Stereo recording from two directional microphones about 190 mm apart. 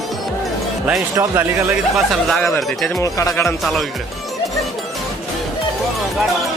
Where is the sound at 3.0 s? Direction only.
15° left (ahead or behind).